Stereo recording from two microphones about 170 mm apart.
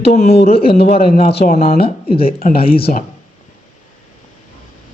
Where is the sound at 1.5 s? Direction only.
55° left (ahead or behind).